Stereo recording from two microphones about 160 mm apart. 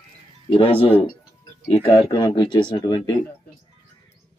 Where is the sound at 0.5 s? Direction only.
35° left (ahead or behind).